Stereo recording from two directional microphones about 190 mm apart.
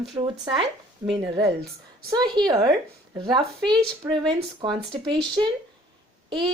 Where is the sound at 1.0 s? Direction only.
15° right (ahead or behind).